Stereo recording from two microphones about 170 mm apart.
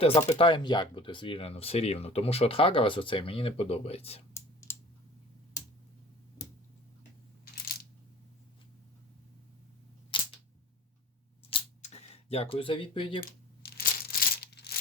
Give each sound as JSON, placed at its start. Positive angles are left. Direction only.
{"t": 0.3, "sound": "speech", "side_deg": 30}
{"t": 4.4, "sound": "clicking", "side_deg": 15}
{"t": 10.1, "sound": "camera", "side_deg": 30}
{"t": 11.5, "sound": "a sound", "side_deg": 35}
{"t": 13.6, "sound": "tearing", "side_deg": 65}